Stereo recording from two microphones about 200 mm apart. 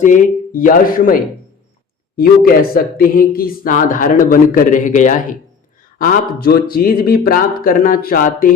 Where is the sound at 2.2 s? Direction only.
50° left (ahead or behind).